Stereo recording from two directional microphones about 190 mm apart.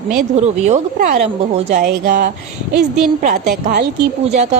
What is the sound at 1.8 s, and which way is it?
Speech, 50° right (ahead or behind).